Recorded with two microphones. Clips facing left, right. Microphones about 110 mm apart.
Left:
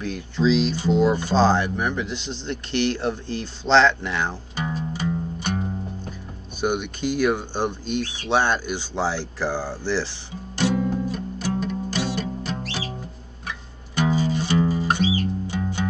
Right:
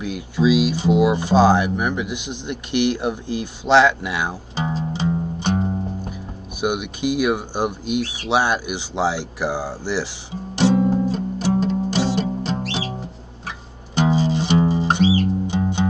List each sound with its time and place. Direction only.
0.0 s speech: 10° right (ahead or behind)
4.6 s music: 25° right (ahead or behind)
6.6 s speech: 10° right (ahead or behind)
10.5 s music: 20° right (ahead or behind)
10.9 s music: 30° right (ahead or behind)